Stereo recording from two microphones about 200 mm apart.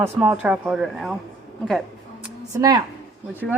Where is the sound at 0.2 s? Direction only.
5° right (ahead or behind).